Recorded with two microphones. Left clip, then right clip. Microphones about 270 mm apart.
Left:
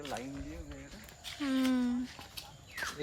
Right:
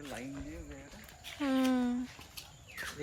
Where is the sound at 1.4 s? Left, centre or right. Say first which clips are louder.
Right 1 dB; centre.